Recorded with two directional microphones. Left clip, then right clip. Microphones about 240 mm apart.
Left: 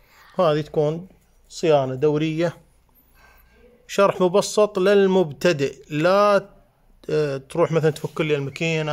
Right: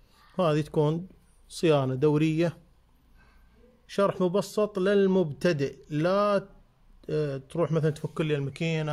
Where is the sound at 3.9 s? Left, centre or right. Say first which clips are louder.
Left 8 dB; centre.